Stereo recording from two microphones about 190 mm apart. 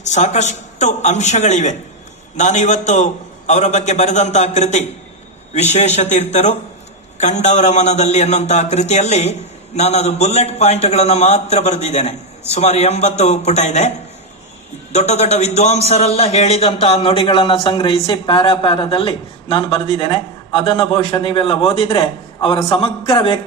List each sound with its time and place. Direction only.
0.0 s a man's voice: 40° left (ahead or behind)
14.9 s a man's voice: 35° left (ahead or behind)